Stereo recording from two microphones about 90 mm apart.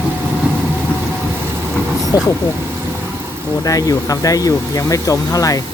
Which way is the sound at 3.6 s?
40° left (ahead or behind).